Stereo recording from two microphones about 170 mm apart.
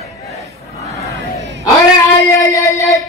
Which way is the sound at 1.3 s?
20° right (ahead or behind).